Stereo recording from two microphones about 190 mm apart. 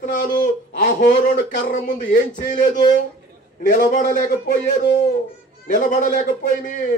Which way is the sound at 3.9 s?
40° left (ahead or behind).